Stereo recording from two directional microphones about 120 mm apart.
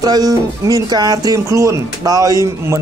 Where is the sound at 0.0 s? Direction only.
30° right (ahead or behind).